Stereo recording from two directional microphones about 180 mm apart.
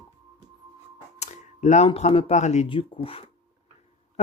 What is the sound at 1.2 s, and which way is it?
Camera, 40° left (ahead or behind).